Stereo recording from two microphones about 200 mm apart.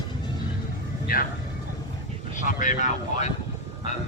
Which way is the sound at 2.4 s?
40° left (ahead or behind).